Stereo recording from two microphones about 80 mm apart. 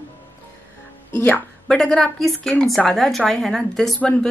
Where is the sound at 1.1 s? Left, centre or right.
Left.